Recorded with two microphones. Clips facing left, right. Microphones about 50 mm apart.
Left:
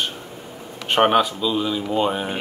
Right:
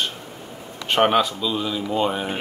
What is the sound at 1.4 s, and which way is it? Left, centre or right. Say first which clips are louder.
Speech: left 2 dB; centre.